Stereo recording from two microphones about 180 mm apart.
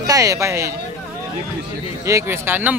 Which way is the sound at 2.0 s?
15° right (ahead or behind).